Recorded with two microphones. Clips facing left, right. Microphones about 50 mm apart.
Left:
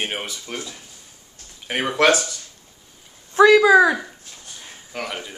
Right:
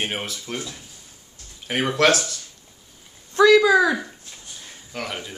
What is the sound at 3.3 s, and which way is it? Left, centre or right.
Speech, centre.